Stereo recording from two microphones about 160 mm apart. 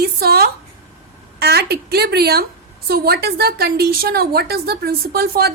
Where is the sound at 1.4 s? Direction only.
85° right.